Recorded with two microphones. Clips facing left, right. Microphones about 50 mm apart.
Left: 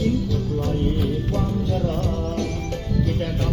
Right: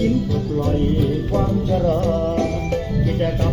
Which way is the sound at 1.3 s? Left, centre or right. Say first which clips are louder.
Right 5 dB; centre.